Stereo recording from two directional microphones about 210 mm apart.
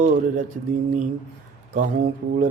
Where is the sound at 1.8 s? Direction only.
40° right (ahead or behind).